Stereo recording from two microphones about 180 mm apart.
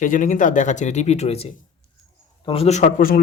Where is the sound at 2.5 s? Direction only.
35° left (ahead or behind); by 3.2 s 50° left (ahead or behind).